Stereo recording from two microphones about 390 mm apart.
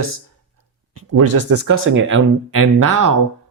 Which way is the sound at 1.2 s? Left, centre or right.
Right.